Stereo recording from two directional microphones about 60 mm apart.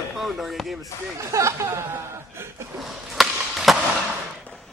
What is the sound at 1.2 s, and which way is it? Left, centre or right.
Speech, right.